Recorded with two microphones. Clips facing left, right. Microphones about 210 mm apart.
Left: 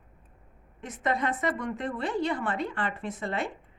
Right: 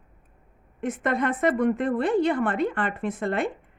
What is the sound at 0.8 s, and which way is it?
A woman's voice, 55° right (ahead or behind).